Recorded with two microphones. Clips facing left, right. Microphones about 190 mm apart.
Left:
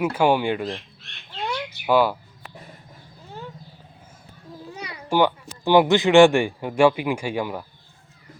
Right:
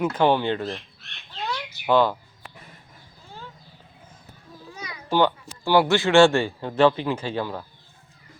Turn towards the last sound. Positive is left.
turn(degrees=15)  # may be behind; listen again after turning